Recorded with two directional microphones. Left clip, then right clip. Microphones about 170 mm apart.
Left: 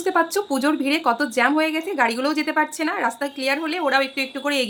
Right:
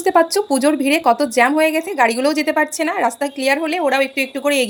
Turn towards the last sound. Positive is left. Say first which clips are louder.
# right 6 dB
turn(degrees=-15)  # may be behind; listen again after turning